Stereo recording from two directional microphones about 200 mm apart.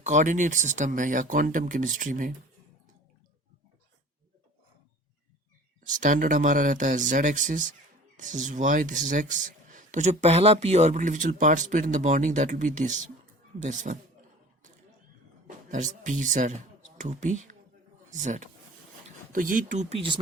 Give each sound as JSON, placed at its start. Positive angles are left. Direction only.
{"t": 0.0, "sound": "speech", "side_deg": -35}
{"t": 5.9, "sound": "speech", "side_deg": -40}
{"t": 15.4, "sound": "speech", "side_deg": -40}